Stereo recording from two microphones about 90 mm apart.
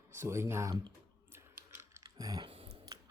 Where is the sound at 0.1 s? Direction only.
30° right (ahead or behind).